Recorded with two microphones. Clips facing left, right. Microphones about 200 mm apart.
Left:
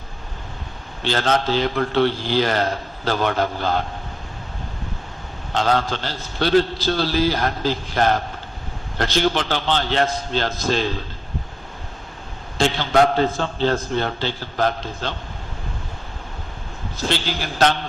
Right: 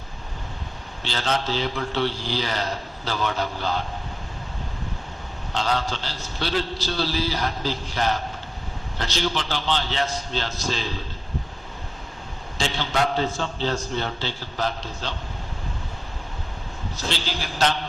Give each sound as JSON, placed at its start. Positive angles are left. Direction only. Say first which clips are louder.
{"t": 1.0, "sound": "a man's voice", "louder": "left 6 dB", "side_deg": 55}
{"t": 5.5, "sound": "a man's voice", "louder": "left 5 dB", "side_deg": 55}
{"t": 12.5, "sound": "a man's voice", "louder": "left 8 dB", "side_deg": 55}